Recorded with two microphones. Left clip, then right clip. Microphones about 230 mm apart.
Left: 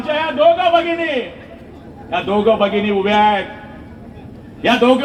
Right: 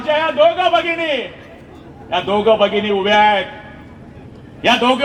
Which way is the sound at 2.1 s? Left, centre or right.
Right.